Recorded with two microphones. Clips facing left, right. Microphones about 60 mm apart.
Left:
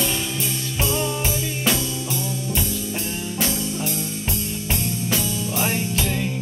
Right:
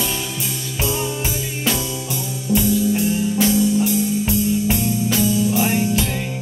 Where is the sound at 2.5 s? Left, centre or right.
Centre.